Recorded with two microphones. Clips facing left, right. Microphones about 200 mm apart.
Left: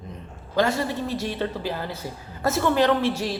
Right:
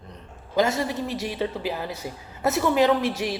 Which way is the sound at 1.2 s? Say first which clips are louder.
Even; 15° right (ahead or behind).